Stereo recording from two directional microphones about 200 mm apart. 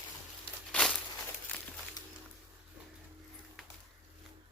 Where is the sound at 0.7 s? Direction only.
5° left (ahead or behind).